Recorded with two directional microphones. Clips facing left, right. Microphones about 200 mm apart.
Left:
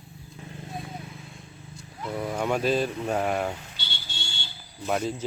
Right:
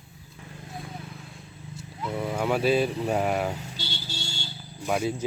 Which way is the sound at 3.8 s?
40° right (ahead or behind).